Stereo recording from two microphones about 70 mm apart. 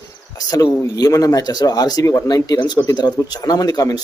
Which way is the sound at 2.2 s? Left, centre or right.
Left.